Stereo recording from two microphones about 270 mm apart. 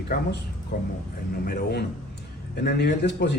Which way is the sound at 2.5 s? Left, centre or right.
Left.